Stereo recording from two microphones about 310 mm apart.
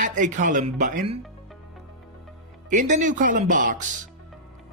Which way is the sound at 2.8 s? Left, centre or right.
Right.